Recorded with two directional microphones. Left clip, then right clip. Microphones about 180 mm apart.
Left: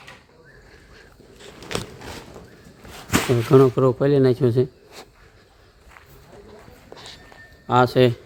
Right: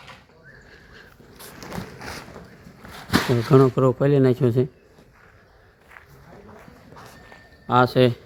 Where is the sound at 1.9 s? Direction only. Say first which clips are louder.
Right 2 dB; centre (ahead or behind).